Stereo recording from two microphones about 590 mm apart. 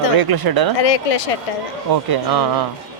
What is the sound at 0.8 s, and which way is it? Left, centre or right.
Speech, left.